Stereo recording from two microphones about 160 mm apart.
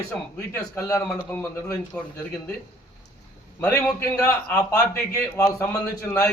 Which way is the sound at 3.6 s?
10° left (ahead or behind).